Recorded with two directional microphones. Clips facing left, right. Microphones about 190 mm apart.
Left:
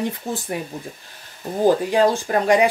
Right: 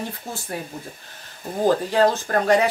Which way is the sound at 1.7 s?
15° left (ahead or behind).